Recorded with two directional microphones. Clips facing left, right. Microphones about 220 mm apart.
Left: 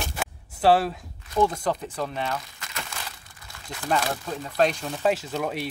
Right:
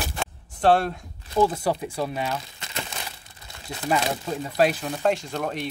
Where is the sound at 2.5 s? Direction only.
25° right (ahead or behind).